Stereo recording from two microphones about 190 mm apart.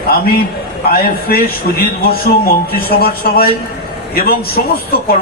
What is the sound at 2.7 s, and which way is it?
Speech, 55° left (ahead or behind).